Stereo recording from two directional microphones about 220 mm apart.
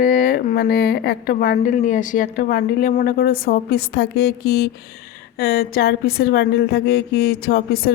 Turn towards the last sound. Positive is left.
turn(degrees=45)  # may be behind; listen again after turning